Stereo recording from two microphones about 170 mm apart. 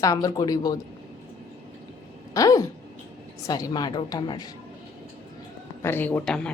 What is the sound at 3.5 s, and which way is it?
Speech, 25° left (ahead or behind).